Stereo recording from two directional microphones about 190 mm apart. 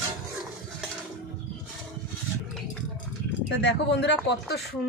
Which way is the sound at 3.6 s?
65° left (ahead or behind).